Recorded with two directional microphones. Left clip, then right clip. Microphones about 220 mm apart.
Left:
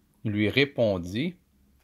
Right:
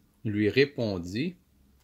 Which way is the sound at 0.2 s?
30° left (ahead or behind).